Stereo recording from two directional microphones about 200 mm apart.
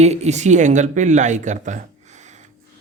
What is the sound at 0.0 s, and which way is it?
A woman's voice, 35° right (ahead or behind).